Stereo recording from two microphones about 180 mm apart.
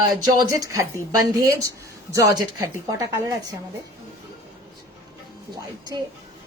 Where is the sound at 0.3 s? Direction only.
20° right (ahead or behind).